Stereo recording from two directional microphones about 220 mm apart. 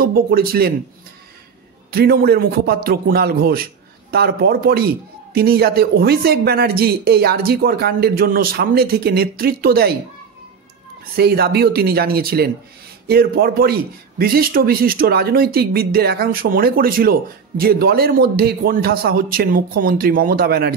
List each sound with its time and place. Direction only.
0.0 s a man's voice: 40° right (ahead or behind)
1.9 s a man's voice: 45° right (ahead or behind)
11.1 s a man's voice: 45° right (ahead or behind)